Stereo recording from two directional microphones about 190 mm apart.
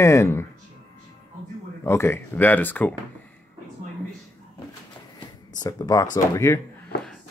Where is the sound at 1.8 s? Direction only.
15° left (ahead or behind).